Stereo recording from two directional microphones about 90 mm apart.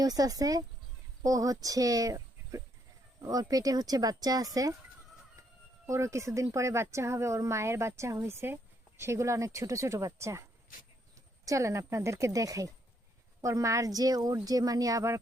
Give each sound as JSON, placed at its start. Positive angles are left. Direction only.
{"t": 0.0, "sound": "speech", "side_deg": -45}
{"t": 5.8, "sound": "speech", "side_deg": -35}
{"t": 11.4, "sound": "speech", "side_deg": -35}